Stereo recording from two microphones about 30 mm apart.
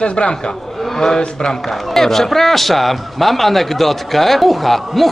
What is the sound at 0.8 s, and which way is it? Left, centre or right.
Speech, centre.